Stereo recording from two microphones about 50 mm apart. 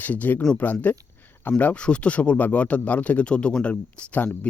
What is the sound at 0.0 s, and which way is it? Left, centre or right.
Speech, left.